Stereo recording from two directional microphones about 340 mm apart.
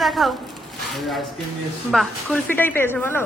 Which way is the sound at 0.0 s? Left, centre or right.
Centre.